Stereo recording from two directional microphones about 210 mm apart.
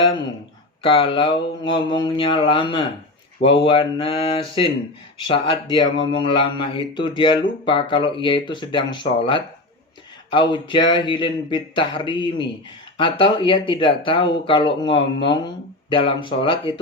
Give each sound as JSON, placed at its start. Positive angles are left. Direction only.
{"t": 0.8, "sound": "a man's voice", "side_deg": 25}